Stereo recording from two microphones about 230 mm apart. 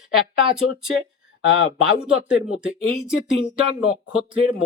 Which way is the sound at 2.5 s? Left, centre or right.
Centre.